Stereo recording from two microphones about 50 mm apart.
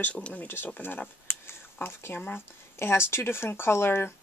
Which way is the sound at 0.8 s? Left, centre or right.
Left.